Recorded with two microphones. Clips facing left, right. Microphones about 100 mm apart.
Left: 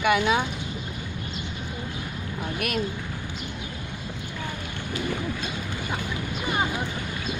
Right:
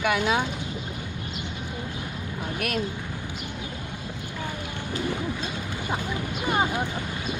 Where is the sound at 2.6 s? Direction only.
5° left (ahead or behind).